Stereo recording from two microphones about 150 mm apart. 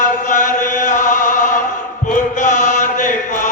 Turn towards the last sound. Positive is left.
turn(degrees=60)  # may be behind; listen again after turning